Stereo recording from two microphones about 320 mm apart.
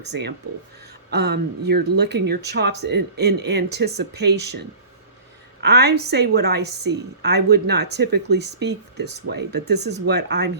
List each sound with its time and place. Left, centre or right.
0.1 s speech: right